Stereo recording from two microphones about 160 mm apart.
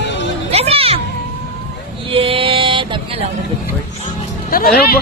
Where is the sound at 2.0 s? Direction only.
35° right (ahead or behind).